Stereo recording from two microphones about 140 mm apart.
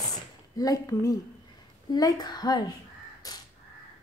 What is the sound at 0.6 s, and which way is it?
Speech, 25° left (ahead or behind).